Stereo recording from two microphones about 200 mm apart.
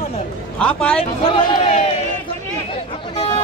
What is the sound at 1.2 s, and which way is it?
Speech, 25° left (ahead or behind).